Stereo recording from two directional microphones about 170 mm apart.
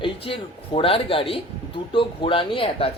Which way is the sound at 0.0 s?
30° left (ahead or behind).